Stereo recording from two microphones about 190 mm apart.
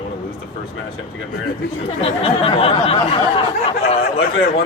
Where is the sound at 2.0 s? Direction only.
30° left (ahead or behind).